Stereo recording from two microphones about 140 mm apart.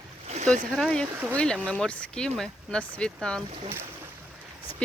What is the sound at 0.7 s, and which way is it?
Speech, 5° left (ahead or behind).